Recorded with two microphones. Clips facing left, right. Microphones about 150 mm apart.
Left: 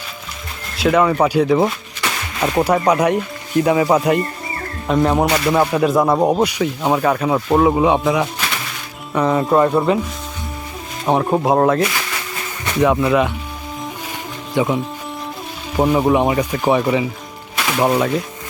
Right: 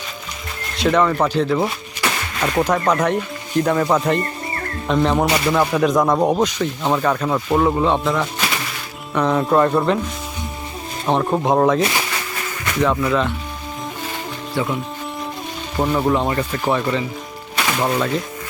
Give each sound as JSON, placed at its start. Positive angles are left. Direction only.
{"t": 0.8, "sound": "speech", "side_deg": 5}
{"t": 11.0, "sound": "speech", "side_deg": 10}
{"t": 12.8, "sound": "speech", "side_deg": 20}
{"t": 14.5, "sound": "speech", "side_deg": 15}